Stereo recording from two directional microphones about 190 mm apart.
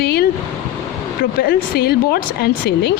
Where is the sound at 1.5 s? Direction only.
55° left (ahead or behind).